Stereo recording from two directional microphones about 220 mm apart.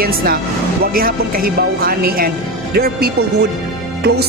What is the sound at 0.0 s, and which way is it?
Speech, 45° right (ahead or behind).